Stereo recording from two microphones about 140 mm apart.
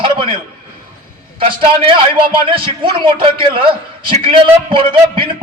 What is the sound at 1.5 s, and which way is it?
A man's voice, 40° right (ahead or behind).